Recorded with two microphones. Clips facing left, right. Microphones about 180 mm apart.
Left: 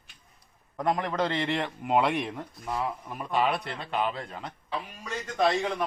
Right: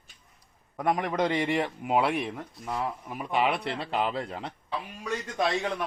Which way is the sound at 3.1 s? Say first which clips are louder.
Right 1 dB; 15° right (ahead or behind).